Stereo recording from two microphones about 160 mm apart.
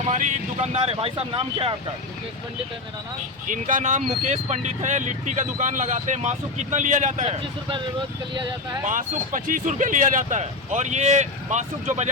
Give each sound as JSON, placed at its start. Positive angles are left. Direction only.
{"t": 0.0, "sound": "speech", "side_deg": -45}
{"t": 3.4, "sound": "speech", "side_deg": -55}
{"t": 8.8, "sound": "speech", "side_deg": -55}